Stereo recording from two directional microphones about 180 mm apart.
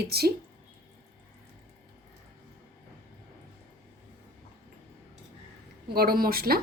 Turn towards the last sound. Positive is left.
turn(degrees=-55)  # may be behind; listen again after turning